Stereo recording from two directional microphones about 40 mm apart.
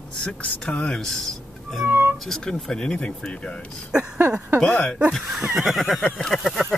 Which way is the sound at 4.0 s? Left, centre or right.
Right.